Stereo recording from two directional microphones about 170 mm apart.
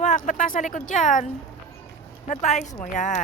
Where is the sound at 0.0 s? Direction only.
50° left (ahead or behind).